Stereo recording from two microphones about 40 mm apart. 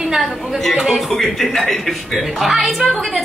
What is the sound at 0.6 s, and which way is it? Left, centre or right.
A man's voice, centre.